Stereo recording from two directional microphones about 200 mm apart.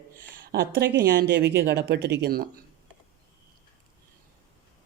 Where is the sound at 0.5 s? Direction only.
55° right (ahead or behind).